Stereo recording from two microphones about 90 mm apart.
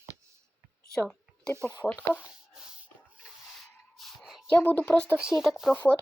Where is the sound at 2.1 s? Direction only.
10° right (ahead or behind).